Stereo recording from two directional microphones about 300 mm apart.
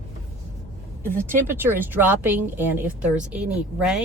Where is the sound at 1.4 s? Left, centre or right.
Centre.